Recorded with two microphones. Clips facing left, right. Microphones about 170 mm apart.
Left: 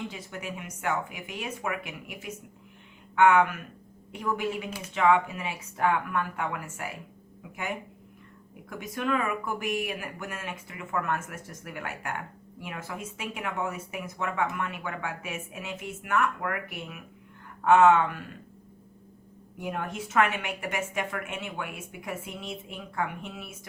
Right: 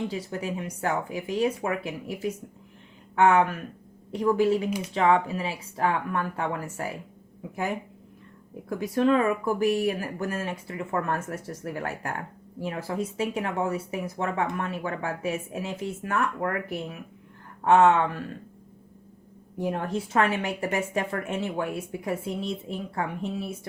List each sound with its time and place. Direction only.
0.1 s speech: 35° right (ahead or behind)
8.7 s speech: 35° right (ahead or behind)
19.5 s speech: 35° right (ahead or behind)